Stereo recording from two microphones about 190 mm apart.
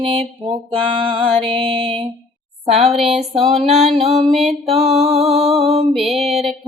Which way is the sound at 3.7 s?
35° right (ahead or behind).